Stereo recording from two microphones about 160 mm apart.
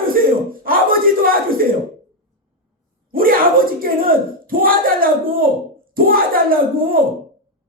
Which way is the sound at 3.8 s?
65° right (ahead or behind).